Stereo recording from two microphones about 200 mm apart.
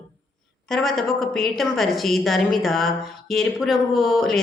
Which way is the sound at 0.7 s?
Centre (ahead or behind).